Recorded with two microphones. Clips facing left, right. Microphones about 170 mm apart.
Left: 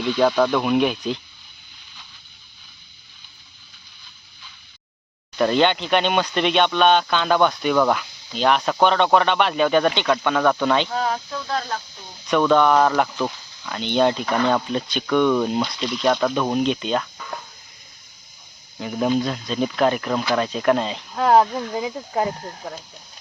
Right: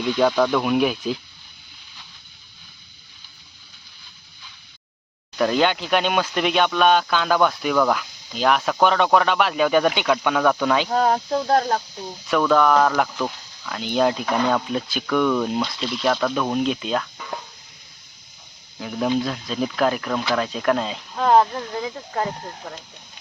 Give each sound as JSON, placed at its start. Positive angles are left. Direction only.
{"t": 0.0, "sound": "speech", "side_deg": 0}
{"t": 5.4, "sound": "speech", "side_deg": 0}
{"t": 10.8, "sound": "speech", "side_deg": -45}
{"t": 12.3, "sound": "speech", "side_deg": 0}
{"t": 18.8, "sound": "speech", "side_deg": 0}